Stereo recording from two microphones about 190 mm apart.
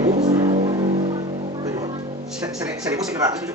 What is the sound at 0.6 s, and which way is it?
Music, 25° right (ahead or behind).